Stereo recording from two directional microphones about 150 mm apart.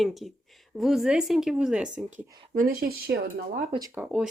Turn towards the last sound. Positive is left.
turn(degrees=-15)  # may be behind; listen again after turning